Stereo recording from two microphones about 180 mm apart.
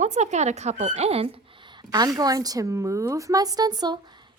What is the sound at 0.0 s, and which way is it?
Speech, 40° right (ahead or behind).